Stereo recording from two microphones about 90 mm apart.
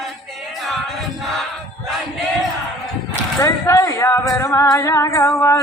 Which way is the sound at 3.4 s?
35° left (ahead or behind).